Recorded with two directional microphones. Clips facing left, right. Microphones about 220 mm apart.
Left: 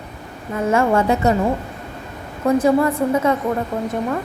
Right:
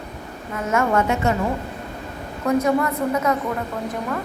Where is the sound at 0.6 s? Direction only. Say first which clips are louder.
Left 4 dB; 30° left (ahead or behind).